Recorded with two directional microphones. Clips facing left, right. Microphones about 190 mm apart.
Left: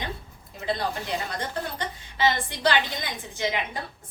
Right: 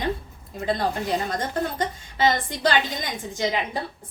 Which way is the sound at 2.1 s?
45° right (ahead or behind).